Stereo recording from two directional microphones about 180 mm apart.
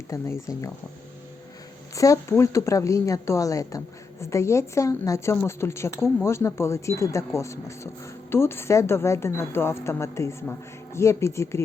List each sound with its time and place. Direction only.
0.1 s speech: 15° left (ahead or behind)
2.0 s speech: 15° left (ahead or behind)